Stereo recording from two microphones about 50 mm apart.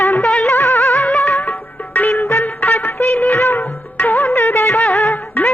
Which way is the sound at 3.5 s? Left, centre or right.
Left.